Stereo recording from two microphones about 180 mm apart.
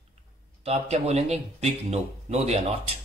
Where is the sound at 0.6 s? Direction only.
35° right (ahead or behind).